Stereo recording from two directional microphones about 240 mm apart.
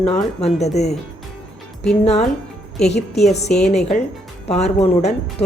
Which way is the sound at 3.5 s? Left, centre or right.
Centre.